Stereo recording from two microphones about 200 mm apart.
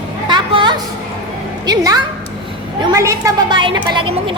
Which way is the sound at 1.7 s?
20° right (ahead or behind).